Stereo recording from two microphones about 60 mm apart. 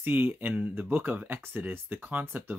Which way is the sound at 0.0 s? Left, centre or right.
Right.